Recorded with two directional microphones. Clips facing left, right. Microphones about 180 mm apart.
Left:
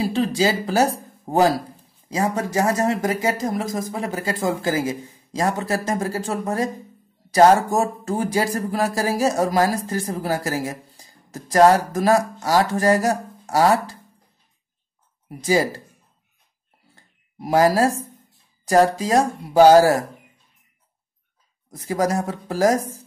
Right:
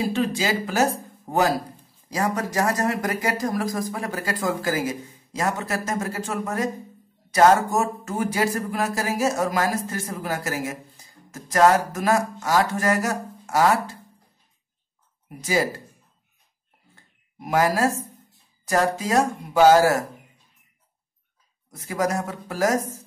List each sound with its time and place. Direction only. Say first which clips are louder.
0.0 s speech: left 4 dB; 35° left (ahead or behind)
15.2 s speech: left 4 dB; 35° left (ahead or behind)
16.9 s a sound: left 5 dB; 35° left (ahead or behind)
18.7 s speech: left 5 dB; 35° left (ahead or behind)
21.6 s speech: left 3 dB; 35° left (ahead or behind)